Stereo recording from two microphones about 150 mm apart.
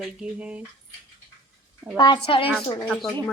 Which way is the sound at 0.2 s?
10° right (ahead or behind).